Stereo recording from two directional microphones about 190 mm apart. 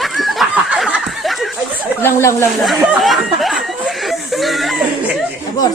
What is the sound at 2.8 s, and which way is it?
Speech, 5° right (ahead or behind).